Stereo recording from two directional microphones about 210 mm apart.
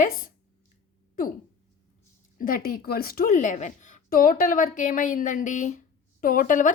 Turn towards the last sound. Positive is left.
turn(degrees=40)  # may be behind; listen again after turning